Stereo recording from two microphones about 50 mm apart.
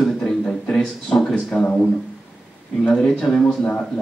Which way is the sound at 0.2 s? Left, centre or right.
Centre.